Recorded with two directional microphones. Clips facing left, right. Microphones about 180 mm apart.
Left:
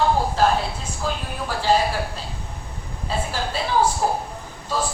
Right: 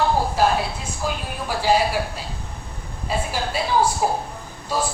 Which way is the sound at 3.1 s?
10° right (ahead or behind).